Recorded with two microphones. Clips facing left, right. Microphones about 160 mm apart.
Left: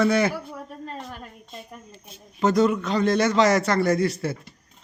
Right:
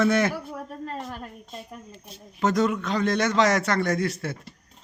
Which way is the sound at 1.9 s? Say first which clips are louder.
Right 1 dB; centre (ahead or behind).